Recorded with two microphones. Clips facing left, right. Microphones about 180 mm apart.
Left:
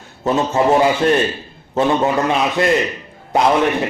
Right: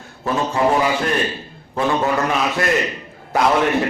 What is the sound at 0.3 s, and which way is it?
Speech, 25° left (ahead or behind).